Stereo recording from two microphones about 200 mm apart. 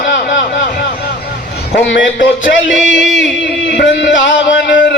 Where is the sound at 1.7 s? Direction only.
65° left (ahead or behind).